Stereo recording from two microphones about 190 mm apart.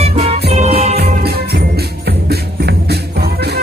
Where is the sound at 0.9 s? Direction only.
55° right (ahead or behind).